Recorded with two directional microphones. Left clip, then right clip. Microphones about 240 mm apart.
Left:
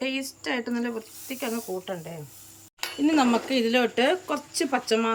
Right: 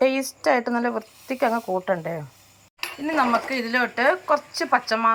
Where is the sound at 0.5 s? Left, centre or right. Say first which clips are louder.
Right 7 dB; right.